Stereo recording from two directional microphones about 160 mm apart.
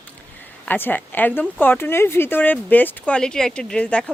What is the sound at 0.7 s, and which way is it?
Speech, 10° left (ahead or behind).